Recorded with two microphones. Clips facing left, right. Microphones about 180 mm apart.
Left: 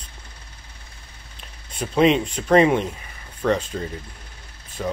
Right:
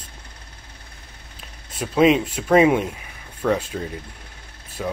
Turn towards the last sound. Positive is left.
turn(degrees=0)  # may be behind; listen again after turning